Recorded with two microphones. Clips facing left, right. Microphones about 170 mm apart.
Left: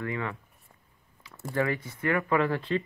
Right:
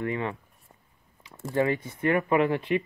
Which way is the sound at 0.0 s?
20° right (ahead or behind).